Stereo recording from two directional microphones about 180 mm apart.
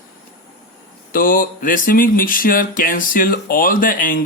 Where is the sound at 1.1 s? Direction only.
50° left (ahead or behind).